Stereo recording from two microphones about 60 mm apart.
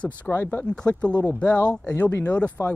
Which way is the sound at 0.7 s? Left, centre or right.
Centre.